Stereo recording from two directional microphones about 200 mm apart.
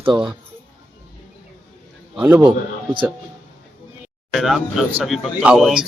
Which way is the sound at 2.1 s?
10° right (ahead or behind).